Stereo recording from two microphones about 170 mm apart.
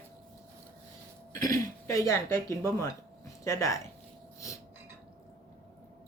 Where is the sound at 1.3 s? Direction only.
20° left (ahead or behind).